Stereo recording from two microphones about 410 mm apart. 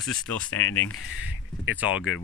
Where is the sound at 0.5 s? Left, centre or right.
Left.